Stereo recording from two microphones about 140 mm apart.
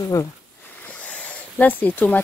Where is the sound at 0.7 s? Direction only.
10° left (ahead or behind).